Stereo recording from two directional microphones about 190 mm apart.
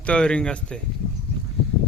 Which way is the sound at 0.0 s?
5° left (ahead or behind).